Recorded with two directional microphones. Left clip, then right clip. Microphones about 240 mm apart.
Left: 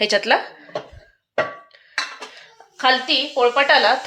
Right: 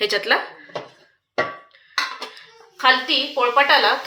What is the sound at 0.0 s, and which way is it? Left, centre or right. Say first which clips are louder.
Speech: left 2 dB; left.